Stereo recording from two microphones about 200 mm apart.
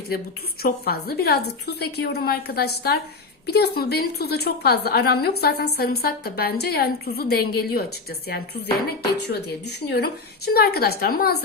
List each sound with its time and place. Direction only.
0.6 s a woman's voice: 50° left (ahead or behind)
9.2 s a woman's voice: 55° left (ahead or behind)